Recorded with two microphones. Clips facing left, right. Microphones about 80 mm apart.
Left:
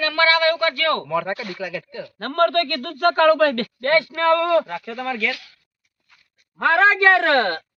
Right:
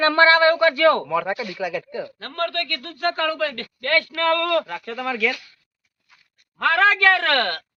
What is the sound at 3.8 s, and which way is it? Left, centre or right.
Speech, left.